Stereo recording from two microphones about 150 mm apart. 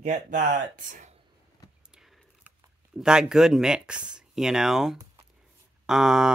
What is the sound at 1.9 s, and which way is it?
Keys jangling, 5° right (ahead or behind).